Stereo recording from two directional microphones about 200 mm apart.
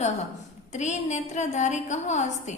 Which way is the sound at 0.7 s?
35° left (ahead or behind).